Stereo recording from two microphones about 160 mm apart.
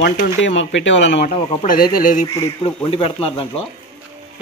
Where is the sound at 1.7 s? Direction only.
65° left (ahead or behind).